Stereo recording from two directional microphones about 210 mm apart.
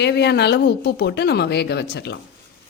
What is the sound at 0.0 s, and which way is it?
Speech, 55° left (ahead or behind).